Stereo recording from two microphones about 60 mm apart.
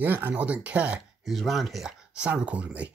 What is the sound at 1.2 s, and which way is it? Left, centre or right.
Speech, centre.